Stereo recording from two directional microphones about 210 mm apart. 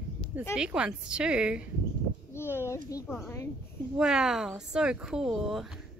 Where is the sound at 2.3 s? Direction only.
10° left (ahead or behind).